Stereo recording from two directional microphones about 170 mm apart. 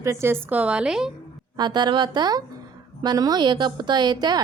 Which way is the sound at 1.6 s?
25° right (ahead or behind).